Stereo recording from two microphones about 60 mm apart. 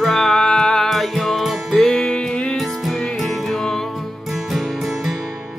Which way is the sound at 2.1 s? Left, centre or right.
Centre.